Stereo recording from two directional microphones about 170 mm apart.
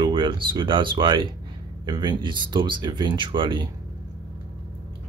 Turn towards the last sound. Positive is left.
turn(degrees=-30)  # may be behind; listen again after turning